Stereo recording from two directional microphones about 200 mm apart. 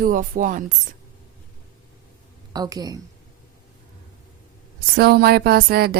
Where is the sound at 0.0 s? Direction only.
40° right (ahead or behind).